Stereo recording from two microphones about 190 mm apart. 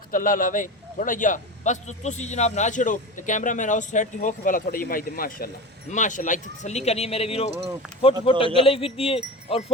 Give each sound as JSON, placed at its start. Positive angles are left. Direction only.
{"t": 0.1, "sound": "a man's voice", "side_deg": 45}